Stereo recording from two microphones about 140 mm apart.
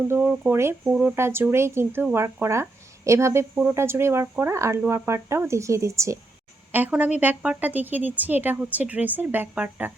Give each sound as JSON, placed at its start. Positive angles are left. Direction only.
{"t": 0.1, "sound": "a woman's voice", "side_deg": -15}